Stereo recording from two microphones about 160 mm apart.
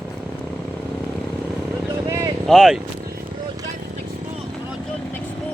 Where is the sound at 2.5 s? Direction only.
Centre (ahead or behind).